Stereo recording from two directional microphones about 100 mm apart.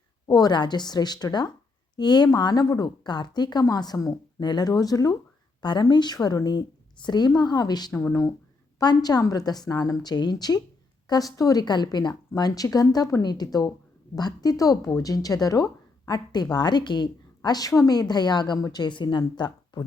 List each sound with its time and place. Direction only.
0.3 s speech: 40° left (ahead or behind)
5.6 s speech: 50° left (ahead or behind)